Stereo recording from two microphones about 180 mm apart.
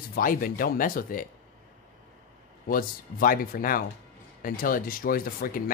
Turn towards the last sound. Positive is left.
turn(degrees=55)  # may be behind; listen again after turning